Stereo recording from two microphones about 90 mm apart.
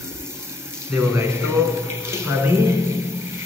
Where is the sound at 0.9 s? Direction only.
30° right (ahead or behind).